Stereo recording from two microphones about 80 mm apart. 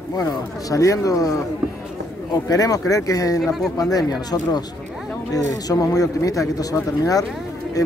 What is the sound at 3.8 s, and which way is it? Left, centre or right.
Speech, left.